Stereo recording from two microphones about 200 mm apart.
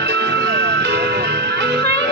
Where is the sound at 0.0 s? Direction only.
55° right (ahead or behind).